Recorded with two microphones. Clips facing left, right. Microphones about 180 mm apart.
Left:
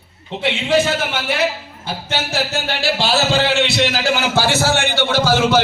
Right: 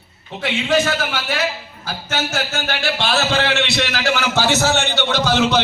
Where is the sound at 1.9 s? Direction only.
30° left (ahead or behind).